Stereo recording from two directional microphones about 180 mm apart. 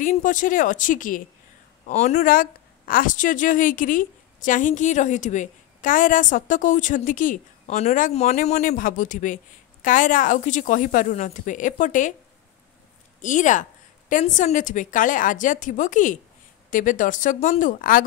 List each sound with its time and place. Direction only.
0.0 s speech: 45° left (ahead or behind)
13.2 s speech: 45° left (ahead or behind)